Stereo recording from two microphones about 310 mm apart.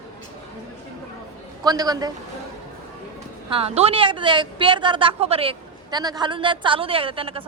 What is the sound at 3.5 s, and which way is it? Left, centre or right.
A woman's voice, centre.